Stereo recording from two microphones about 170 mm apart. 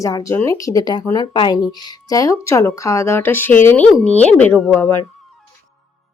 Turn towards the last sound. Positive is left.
turn(degrees=15)  # may be behind; listen again after turning